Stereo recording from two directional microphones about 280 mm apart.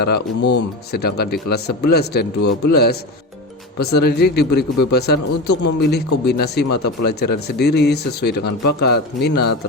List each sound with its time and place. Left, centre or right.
0.0 s a man's voice: left